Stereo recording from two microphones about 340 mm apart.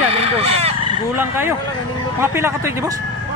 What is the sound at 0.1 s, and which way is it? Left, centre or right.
Fowl, centre.